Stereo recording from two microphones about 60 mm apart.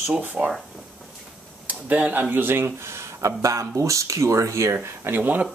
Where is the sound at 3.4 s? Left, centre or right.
Right.